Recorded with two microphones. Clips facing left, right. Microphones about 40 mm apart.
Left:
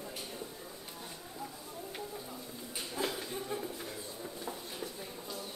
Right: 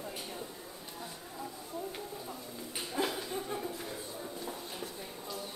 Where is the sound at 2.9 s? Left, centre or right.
Centre.